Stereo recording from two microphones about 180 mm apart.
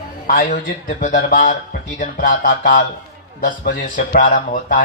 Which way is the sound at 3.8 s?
45° left (ahead or behind).